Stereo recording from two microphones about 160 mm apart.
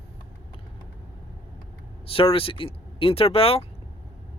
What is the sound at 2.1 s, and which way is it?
Speech, 35° left (ahead or behind).